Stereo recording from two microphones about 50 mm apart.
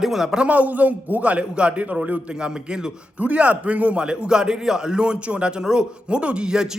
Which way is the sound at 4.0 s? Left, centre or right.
Centre.